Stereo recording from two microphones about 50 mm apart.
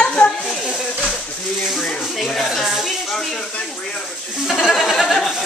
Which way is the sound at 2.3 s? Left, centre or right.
Centre.